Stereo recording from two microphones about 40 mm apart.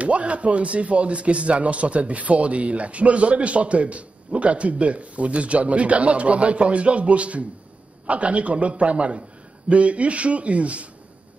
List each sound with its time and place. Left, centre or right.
0.0 s speech: right